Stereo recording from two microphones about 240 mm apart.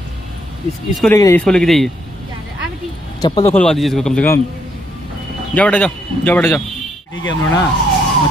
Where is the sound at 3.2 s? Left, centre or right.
Centre.